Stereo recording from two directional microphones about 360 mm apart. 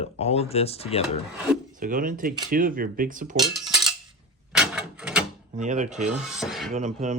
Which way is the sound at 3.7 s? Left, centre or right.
Centre.